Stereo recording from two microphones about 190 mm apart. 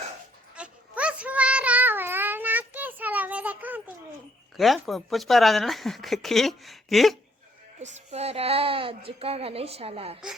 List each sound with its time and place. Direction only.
0.5 s a sound: 5° right (ahead or behind)
4.5 s speech: centre (ahead or behind)
7.8 s a woman's voice: 35° right (ahead or behind)